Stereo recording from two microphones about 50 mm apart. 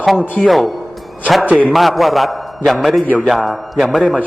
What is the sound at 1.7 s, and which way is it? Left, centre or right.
A man's voice, centre.